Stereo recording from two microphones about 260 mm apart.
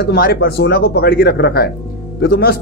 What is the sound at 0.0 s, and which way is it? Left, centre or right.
Speech, left.